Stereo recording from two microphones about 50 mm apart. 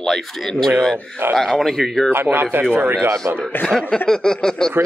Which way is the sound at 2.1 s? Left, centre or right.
Right.